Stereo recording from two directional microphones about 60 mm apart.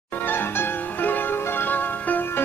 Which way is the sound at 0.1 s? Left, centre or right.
Left.